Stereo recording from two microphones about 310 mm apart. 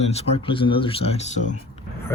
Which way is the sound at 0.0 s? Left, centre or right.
Centre.